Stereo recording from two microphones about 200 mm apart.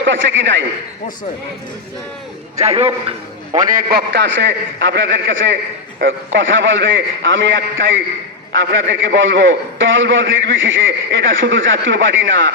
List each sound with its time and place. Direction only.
0.0 s a man's voice: 65° right (ahead or behind)
2.6 s a man's voice: 30° right (ahead or behind)
3.6 s a man's voice: 40° right (ahead or behind); by 12.5 s 70° right (ahead or behind)